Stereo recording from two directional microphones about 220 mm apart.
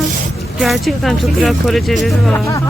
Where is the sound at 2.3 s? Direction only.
15° left (ahead or behind).